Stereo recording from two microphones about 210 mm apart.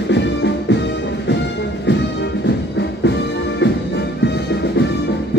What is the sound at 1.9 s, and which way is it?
Music, 55° left (ahead or behind).